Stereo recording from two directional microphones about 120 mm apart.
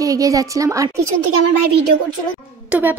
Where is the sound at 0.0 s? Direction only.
30° right (ahead or behind).